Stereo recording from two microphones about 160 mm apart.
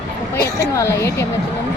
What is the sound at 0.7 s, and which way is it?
Speech, 15° left (ahead or behind).